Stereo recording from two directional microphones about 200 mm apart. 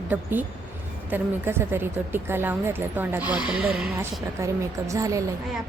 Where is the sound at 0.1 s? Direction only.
10° right (ahead or behind).